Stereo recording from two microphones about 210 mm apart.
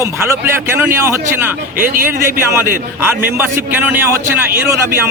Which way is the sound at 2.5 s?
10° right (ahead or behind).